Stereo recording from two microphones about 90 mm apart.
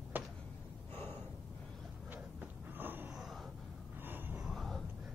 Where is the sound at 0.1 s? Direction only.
20° right (ahead or behind).